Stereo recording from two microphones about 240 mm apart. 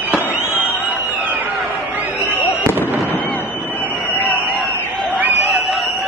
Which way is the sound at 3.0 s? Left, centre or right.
Centre.